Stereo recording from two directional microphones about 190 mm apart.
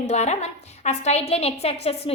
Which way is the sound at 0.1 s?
35° left (ahead or behind).